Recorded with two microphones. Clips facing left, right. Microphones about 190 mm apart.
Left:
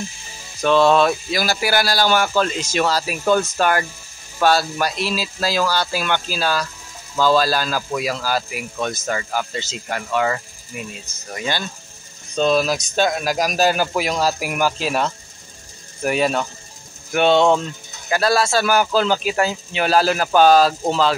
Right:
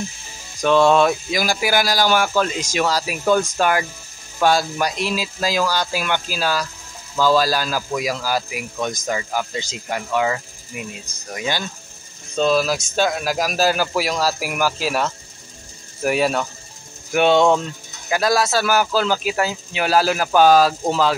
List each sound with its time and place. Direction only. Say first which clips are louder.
0.7 s speech: even; 15° right (ahead or behind)